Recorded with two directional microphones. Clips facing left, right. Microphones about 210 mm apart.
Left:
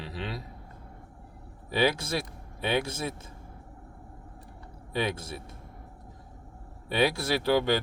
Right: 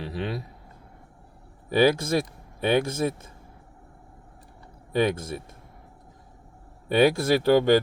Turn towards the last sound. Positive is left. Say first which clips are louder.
# right 6 dB
turn(degrees=-50)  # may be behind; listen again after turning